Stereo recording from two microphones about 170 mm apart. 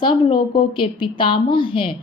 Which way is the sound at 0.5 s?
30° left (ahead or behind).